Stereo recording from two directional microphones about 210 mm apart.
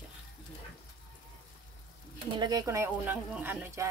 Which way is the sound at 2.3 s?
20° right (ahead or behind).